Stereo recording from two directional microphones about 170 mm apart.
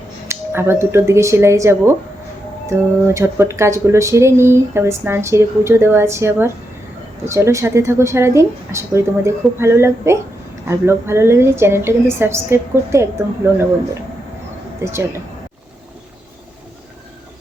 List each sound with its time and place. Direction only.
0.3 s speech: 15° right (ahead or behind)
14.8 s speech: 15° right (ahead or behind)